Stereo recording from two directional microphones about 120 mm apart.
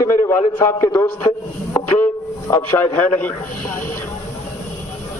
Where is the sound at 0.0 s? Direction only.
20° left (ahead or behind).